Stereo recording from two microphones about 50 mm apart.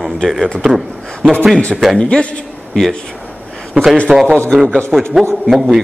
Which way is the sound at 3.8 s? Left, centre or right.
Right.